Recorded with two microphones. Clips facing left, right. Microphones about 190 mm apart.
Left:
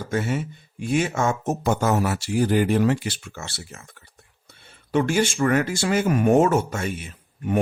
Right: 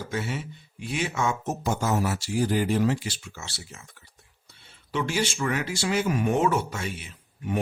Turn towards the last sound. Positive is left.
turn(degrees=50)  # may be behind; listen again after turning